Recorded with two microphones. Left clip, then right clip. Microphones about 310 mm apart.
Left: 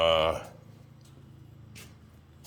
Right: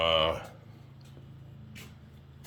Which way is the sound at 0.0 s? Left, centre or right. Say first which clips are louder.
Left 2 dB; centre.